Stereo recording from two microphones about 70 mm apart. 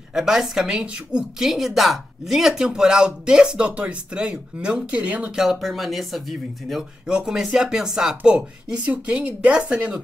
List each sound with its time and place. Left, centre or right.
0.1 s a woman's voice: centre
5.4 s a woman's voice: centre